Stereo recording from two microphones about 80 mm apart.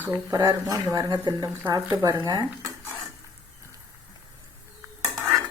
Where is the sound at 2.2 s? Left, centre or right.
Right.